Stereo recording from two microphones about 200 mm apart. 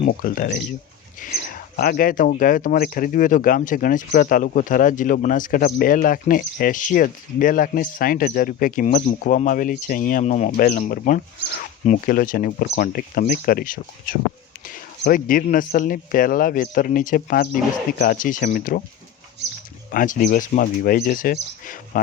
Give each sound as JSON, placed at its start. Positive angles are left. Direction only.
{"t": 0.1, "sound": "speech", "side_deg": 45}
{"t": 19.9, "sound": "speech", "side_deg": 45}